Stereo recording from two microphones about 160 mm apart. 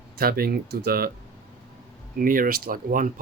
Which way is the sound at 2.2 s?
60° right (ahead or behind).